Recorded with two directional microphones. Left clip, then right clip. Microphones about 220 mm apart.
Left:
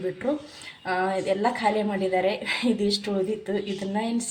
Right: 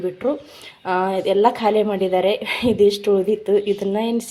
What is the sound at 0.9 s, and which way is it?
A woman's voice, 30° right (ahead or behind).